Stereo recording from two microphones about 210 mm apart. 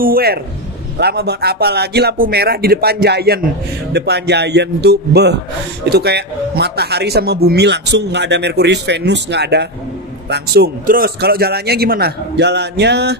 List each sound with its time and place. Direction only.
0.0 s a man's voice: 45° right (ahead or behind)